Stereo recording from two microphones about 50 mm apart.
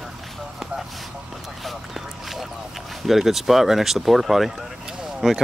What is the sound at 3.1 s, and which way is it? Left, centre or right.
Speech, centre.